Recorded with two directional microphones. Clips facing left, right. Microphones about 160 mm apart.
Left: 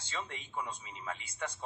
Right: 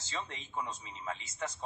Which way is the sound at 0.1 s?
35° right (ahead or behind).